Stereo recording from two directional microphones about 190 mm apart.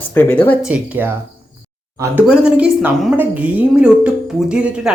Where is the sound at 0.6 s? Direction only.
10° right (ahead or behind).